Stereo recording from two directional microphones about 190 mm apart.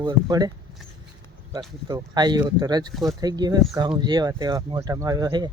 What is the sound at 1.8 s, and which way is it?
Speech, 20° right (ahead or behind).